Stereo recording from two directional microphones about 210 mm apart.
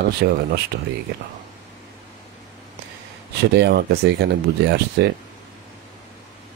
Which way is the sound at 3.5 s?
50° right (ahead or behind).